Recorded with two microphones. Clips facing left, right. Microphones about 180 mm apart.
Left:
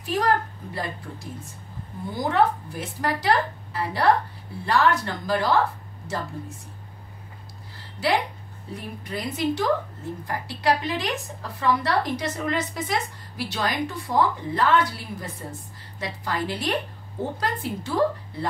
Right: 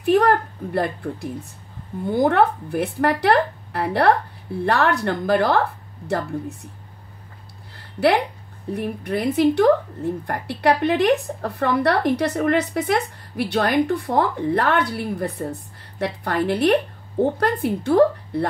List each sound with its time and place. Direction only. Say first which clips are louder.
0.0 s a woman's voice: right 7 dB; 60° right (ahead or behind)
7.7 s a sound: right 6 dB; 60° right (ahead or behind)
8.7 s a woman's voice: right 9 dB; 60° right (ahead or behind)